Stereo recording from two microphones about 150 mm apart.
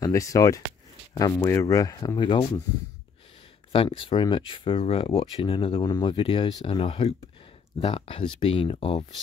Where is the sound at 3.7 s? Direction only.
35° left (ahead or behind).